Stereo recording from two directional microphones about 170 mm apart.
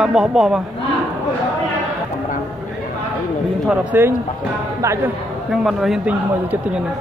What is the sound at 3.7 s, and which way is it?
Speech, 5° right (ahead or behind).